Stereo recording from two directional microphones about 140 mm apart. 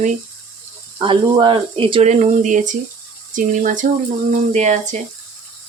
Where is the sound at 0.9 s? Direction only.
35° right (ahead or behind).